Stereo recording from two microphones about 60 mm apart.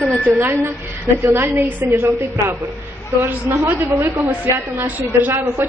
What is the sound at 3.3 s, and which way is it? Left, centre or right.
A woman's voice, right.